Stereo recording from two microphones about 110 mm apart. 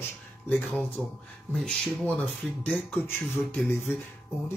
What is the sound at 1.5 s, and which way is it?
Speech, 5° left (ahead or behind).